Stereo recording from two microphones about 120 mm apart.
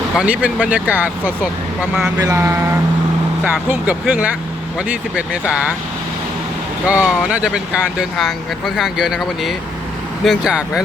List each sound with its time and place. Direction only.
0.2 s speech: 10° right (ahead or behind)
2.2 s a sound: 20° right (ahead or behind)
3.4 s speech: 15° right (ahead or behind)
6.8 s speech: 10° right (ahead or behind)